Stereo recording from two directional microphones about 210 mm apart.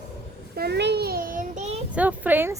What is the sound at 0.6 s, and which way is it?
Child singing, 55° right (ahead or behind).